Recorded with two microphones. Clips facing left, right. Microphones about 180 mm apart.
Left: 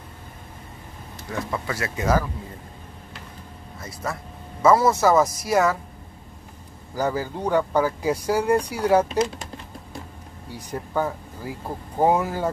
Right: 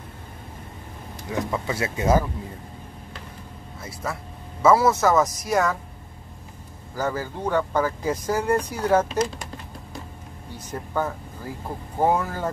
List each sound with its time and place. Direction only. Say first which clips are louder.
1.3 s speech: right 2 dB; 20° right (ahead or behind)
3.8 s speech: left 1 dB; 5° right (ahead or behind)
5.0 s speech: left 2 dB; 5° left (ahead or behind)
7.0 s speech: left 2 dB; 15° left (ahead or behind)
10.5 s speech: left 2 dB; 10° left (ahead or behind)